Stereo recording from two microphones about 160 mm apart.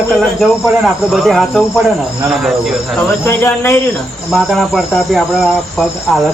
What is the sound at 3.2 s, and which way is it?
Speech, 15° left (ahead or behind).